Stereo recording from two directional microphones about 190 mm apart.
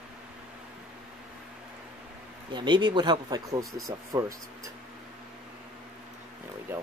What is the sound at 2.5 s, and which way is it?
Speech, 25° right (ahead or behind).